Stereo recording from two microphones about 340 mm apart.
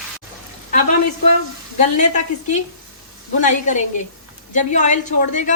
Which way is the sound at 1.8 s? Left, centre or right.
Left.